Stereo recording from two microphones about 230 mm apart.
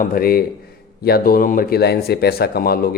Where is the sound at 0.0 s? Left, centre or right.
Left.